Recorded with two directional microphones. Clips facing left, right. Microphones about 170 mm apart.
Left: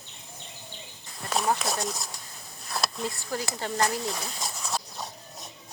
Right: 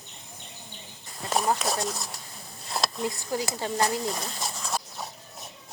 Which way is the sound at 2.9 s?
15° right (ahead or behind).